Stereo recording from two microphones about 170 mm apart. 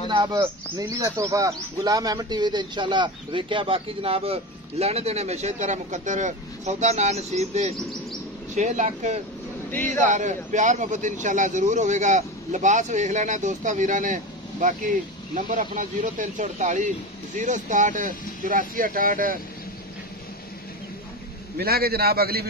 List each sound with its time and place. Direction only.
0.1 s a man's voice: 25° right (ahead or behind); by 19.4 s 55° right (ahead or behind)
21.5 s a man's voice: 65° right (ahead or behind)